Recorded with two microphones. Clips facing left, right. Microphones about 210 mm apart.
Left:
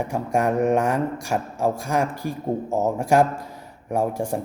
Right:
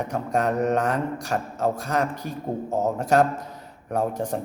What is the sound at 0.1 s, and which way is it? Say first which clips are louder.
Speech: left 2 dB; 10° left (ahead or behind).